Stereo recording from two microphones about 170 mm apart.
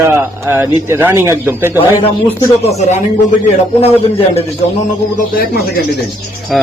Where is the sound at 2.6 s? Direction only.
40° left (ahead or behind).